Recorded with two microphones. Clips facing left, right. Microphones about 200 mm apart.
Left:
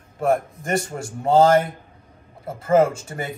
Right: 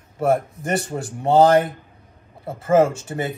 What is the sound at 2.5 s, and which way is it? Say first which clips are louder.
Speech: right 1 dB; centre (ahead or behind).